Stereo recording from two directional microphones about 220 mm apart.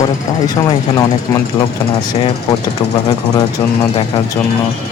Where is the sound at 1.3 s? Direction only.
10° left (ahead or behind).